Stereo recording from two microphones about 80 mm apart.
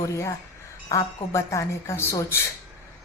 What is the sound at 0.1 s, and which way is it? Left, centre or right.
A woman's voice, left.